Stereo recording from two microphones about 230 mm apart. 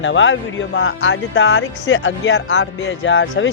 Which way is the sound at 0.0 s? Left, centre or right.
Left.